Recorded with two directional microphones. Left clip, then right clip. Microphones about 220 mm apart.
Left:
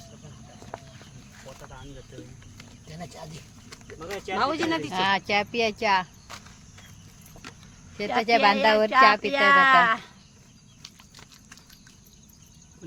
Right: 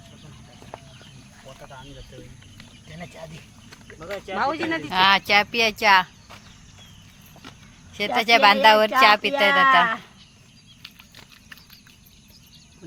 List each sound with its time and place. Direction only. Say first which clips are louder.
0.7 s a sound: even; 20° right (ahead or behind)
2.9 s speech: right 2 dB; 55° left (ahead or behind)
4.0 s speech: right 1 dB; 25° left (ahead or behind)
4.4 s speech: right 1 dB; 40° left (ahead or behind)
4.9 s speech: right 10 dB; 5° right (ahead or behind)
7.9 s speech: right 4 dB; centre (ahead or behind)
9.6 s speech: right 1 dB; 10° right (ahead or behind)